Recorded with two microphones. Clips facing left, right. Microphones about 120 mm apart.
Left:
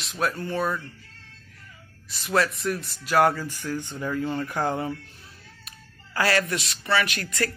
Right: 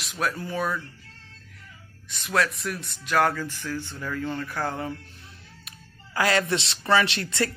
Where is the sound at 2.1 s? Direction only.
Centre (ahead or behind).